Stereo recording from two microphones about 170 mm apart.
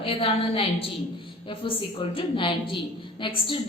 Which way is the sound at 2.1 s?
30° left (ahead or behind).